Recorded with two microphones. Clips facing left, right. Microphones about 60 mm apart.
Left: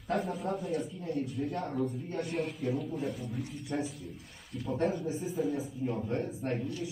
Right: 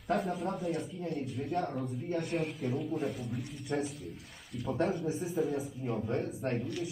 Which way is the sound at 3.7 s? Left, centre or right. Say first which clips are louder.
Right 1 dB; right.